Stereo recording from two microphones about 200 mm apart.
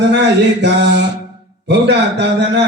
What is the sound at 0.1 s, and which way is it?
A man's voice, 60° right (ahead or behind).